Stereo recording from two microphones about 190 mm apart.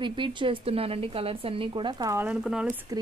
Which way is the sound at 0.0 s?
25° right (ahead or behind).